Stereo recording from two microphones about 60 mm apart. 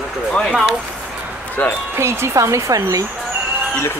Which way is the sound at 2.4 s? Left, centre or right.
Right.